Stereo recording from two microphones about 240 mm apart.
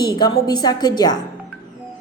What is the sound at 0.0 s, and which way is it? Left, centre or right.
A woman's voice, centre.